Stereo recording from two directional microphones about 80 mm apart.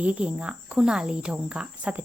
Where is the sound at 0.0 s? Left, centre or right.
Centre.